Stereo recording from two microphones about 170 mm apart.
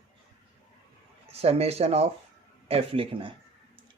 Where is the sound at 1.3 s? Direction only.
35° right (ahead or behind).